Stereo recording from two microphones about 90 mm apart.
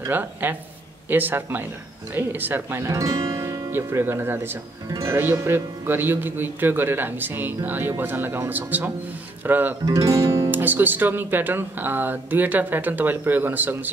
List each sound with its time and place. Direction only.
0.1 s speech: 20° right (ahead or behind)
9.8 s music: 35° right (ahead or behind)
10.5 s speech: 20° right (ahead or behind)